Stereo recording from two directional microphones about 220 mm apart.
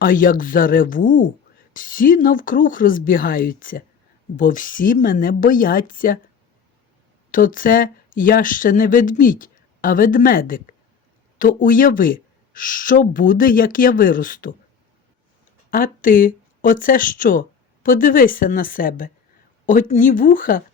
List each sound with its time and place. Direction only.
0.0 s speech: 40° left (ahead or behind)
7.3 s speech: 40° left (ahead or behind)
15.7 s speech: 40° left (ahead or behind)